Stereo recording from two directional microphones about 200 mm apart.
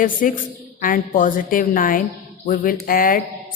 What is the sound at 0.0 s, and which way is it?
A woman's voice, 40° left (ahead or behind).